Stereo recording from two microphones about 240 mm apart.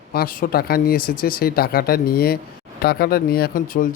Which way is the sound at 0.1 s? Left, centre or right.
Left.